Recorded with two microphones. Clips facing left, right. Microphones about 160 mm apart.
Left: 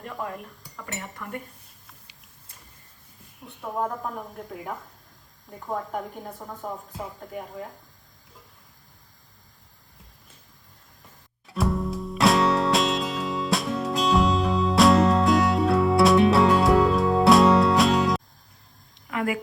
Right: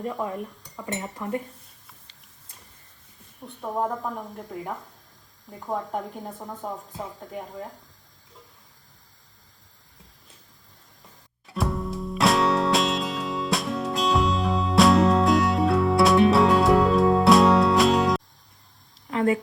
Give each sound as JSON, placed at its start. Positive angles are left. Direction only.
{"t": 0.9, "sound": "speech", "side_deg": -25}
{"t": 3.4, "sound": "speech", "side_deg": 0}
{"t": 5.5, "sound": "speech", "side_deg": 0}
{"t": 11.4, "sound": "music", "side_deg": 0}
{"t": 19.1, "sound": "speech", "side_deg": -35}